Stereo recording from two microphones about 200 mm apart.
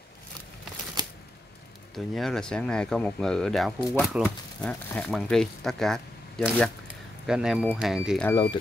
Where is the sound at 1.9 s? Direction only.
Centre (ahead or behind).